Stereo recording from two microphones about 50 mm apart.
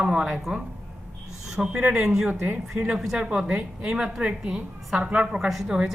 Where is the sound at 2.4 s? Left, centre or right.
Right.